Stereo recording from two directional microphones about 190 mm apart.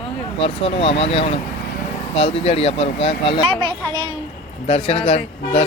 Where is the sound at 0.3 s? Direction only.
30° left (ahead or behind).